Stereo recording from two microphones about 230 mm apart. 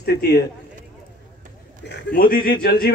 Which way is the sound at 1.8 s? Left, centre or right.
Left.